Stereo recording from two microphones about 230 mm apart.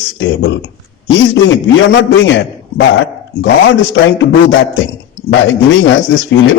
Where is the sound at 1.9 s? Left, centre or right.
Left.